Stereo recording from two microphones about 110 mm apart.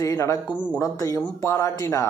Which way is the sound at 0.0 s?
30° left (ahead or behind).